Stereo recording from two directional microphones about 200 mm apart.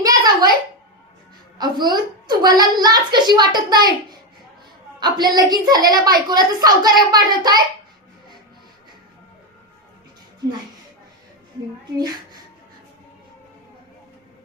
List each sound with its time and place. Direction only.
0.0 s a sound: 20° right (ahead or behind)
1.5 s a woman's voice: 20° right (ahead or behind)
11.9 s a woman's voice: 20° right (ahead or behind)